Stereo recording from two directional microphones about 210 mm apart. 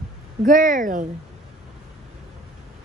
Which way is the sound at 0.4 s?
40° right (ahead or behind).